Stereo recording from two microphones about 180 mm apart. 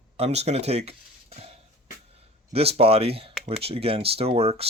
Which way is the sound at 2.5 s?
35° right (ahead or behind).